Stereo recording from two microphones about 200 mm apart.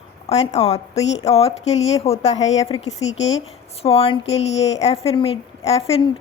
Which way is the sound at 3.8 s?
30° left (ahead or behind).